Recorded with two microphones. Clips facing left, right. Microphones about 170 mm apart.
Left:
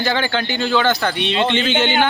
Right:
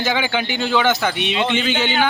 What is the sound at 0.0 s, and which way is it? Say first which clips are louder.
A man's voice: left 1 dB; 10° right (ahead or behind).